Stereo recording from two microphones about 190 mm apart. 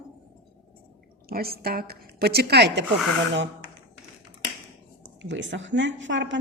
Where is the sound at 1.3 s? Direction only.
55° right (ahead or behind).